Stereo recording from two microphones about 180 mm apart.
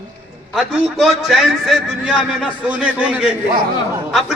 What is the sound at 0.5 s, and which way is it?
A man's voice, centre (ahead or behind).